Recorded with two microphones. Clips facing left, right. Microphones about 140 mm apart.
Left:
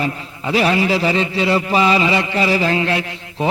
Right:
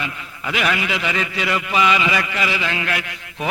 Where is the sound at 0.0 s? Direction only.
35° left (ahead or behind).